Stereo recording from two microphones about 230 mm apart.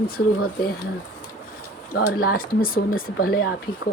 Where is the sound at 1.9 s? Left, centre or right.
Left.